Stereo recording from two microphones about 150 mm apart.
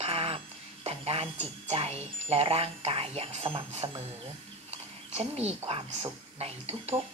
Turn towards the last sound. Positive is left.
turn(degrees=-45)  # may be behind; listen again after turning